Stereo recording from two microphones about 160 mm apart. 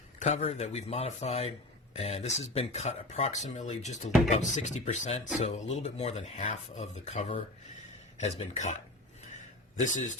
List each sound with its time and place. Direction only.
0.2 s speech: 45° left (ahead or behind)